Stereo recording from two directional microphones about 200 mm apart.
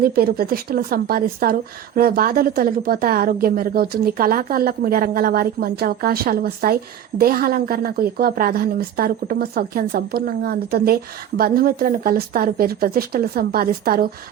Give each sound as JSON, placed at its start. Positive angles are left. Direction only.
{"t": 0.0, "sound": "a woman's voice", "side_deg": -50}